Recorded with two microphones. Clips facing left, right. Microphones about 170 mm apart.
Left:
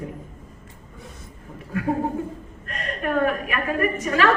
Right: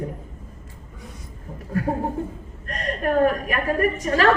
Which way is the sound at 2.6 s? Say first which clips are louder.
Right 3 dB; 40° right (ahead or behind).